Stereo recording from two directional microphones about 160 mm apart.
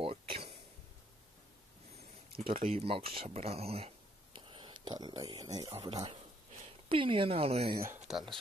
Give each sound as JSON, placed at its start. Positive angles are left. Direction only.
{"t": 0.0, "sound": "a sound", "side_deg": -35}
{"t": 2.3, "sound": "a woman's voice", "side_deg": -35}
{"t": 7.7, "sound": "speech", "side_deg": -15}
{"t": 8.1, "sound": "speech", "side_deg": 0}